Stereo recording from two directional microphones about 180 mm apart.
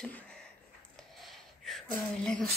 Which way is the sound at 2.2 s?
5° left (ahead or behind).